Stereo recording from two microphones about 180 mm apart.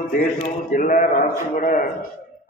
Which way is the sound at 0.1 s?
50° left (ahead or behind).